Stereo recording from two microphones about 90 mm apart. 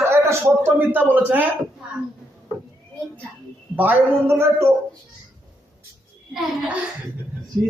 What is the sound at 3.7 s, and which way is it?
Speech, 20° right (ahead or behind).